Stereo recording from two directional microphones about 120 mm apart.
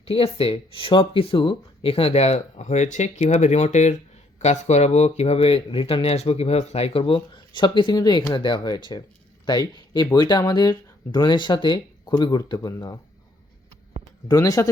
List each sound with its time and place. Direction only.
0.0 s speech: 55° left (ahead or behind); by 13.0 s 30° left (ahead or behind)
14.3 s speech: 30° left (ahead or behind)